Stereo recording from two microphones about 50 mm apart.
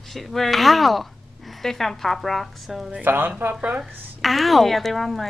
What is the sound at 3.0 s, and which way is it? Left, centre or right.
Speech, right.